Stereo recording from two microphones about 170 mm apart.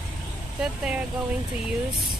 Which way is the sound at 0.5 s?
5° right (ahead or behind).